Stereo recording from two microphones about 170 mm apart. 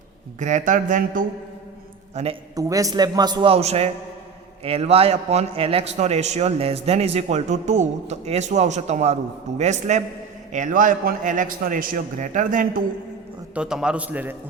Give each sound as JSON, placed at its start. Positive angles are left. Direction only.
{"t": 0.3, "sound": "a man's voice", "side_deg": -45}
{"t": 2.6, "sound": "a man's voice", "side_deg": -20}
{"t": 13.5, "sound": "a man's voice", "side_deg": -5}